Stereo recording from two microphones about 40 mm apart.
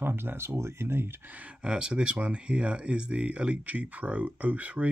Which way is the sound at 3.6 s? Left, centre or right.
Right.